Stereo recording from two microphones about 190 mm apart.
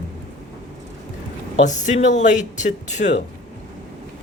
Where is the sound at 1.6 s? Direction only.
40° left (ahead or behind).